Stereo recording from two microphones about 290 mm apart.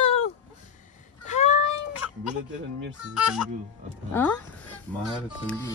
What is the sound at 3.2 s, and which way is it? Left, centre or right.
Speech, centre.